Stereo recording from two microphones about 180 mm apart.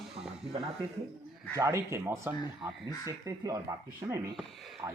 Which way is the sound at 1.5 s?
15° right (ahead or behind).